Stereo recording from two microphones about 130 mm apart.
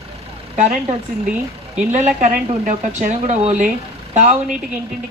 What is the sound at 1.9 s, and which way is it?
Speech, 75° right (ahead or behind).